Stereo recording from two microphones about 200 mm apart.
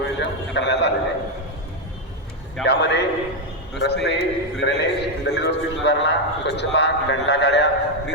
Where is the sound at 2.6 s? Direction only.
55° left (ahead or behind).